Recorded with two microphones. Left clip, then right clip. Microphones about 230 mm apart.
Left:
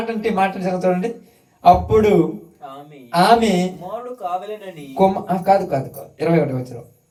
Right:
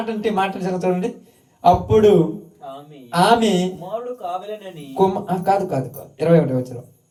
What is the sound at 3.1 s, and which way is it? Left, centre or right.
Speech, right.